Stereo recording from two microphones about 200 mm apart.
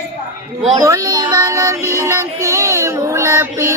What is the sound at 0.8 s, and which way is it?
Music, 15° right (ahead or behind).